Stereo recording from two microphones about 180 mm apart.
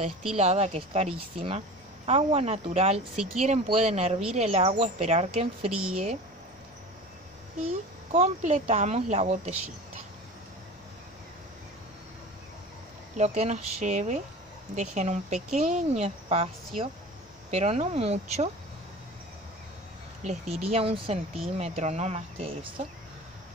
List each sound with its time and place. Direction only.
0.4 s speech: 35° right (ahead or behind)
7.6 s speech: 35° right (ahead or behind)
13.2 s speech: 40° right (ahead or behind)
20.2 s speech: 35° right (ahead or behind)